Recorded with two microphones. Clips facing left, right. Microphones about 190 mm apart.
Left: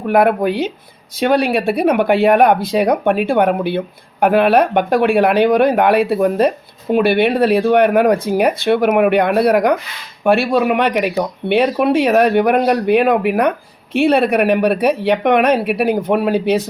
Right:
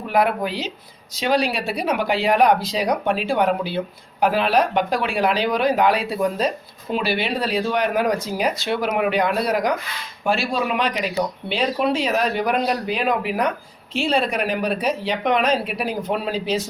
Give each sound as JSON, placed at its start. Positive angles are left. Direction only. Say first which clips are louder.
{"t": 0.1, "sound": "speech", "louder": "left 7 dB", "side_deg": 55}